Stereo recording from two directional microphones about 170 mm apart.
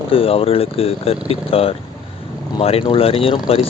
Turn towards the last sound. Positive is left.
turn(degrees=35)  # may be behind; listen again after turning